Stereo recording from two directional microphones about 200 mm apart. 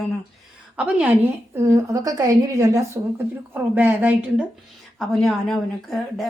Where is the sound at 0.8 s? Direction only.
5° right (ahead or behind).